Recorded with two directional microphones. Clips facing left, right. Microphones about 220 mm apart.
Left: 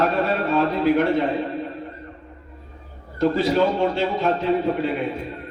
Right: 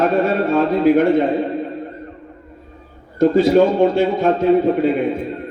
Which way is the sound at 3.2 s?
50° right (ahead or behind).